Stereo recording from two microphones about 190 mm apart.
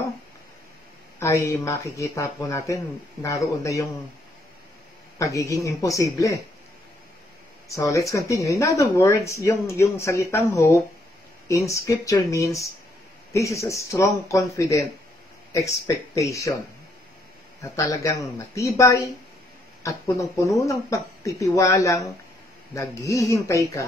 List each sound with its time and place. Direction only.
1.2 s speech: 15° left (ahead or behind)
5.2 s speech: 15° left (ahead or behind)
7.6 s speech: 15° left (ahead or behind)
17.6 s speech: 15° left (ahead or behind)